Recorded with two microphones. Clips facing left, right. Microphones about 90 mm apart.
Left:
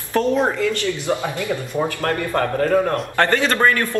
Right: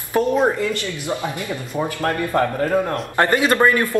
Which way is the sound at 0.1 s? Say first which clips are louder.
Even; 15° right (ahead or behind).